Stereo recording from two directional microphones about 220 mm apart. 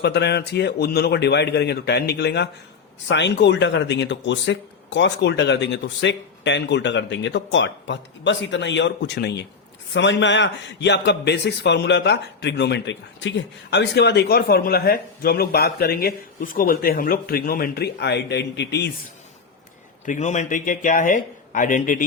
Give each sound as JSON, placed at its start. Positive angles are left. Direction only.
{"t": 0.0, "sound": "a man's voice", "side_deg": 50}
{"t": 20.1, "sound": "a man's voice", "side_deg": 35}